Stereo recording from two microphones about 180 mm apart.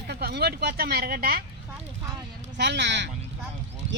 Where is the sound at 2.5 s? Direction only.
75° right (ahead or behind).